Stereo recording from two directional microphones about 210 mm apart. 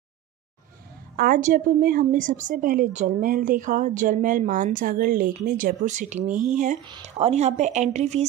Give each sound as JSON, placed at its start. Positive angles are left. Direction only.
{"t": 1.1, "sound": "a woman's voice", "side_deg": -45}
{"t": 6.8, "sound": "a woman's voice", "side_deg": -25}